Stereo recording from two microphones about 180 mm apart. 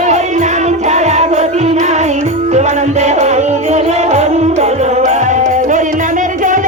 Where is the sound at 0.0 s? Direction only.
40° right (ahead or behind).